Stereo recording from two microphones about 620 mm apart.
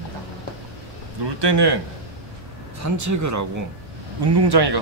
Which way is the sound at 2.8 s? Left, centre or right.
Right.